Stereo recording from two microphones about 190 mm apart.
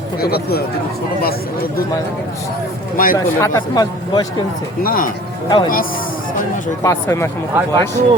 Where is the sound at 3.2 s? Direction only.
20° left (ahead or behind).